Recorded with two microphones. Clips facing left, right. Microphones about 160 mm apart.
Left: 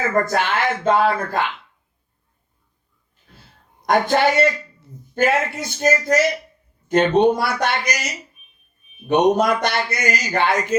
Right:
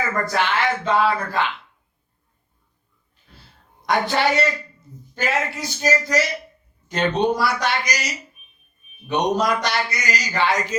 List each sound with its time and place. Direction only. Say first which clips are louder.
0.1 s speech: left 3 dB; 50° left (ahead or behind)
3.8 s a man's voice: left 3 dB; 50° left (ahead or behind)
9.0 s a man's voice: left 5 dB; 55° left (ahead or behind)